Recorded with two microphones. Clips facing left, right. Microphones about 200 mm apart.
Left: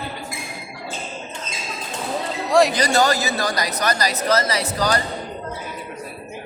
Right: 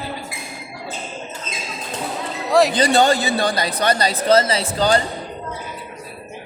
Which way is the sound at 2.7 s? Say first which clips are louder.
Right 3 dB; 30° right (ahead or behind).